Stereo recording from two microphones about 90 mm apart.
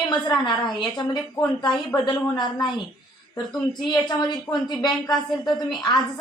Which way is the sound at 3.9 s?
50° left (ahead or behind).